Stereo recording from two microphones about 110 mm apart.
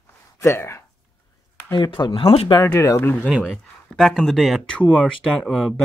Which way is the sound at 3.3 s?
5° right (ahead or behind).